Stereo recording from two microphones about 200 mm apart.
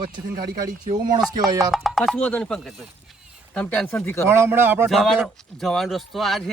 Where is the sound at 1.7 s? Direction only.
Centre (ahead or behind).